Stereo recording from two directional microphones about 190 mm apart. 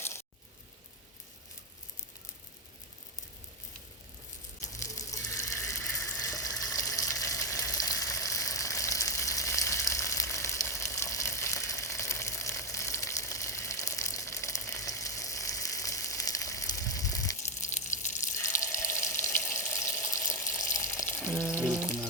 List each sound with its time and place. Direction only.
5.6 s water: 15° left (ahead or behind)
17.7 s water: 40° left (ahead or behind)
18.4 s water: 15° left (ahead or behind)
21.8 s frying: 10° left (ahead or behind)